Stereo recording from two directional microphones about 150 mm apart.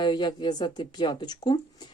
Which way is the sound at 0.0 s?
30° left (ahead or behind).